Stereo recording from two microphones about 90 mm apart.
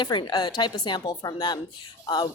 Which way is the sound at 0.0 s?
60° left (ahead or behind).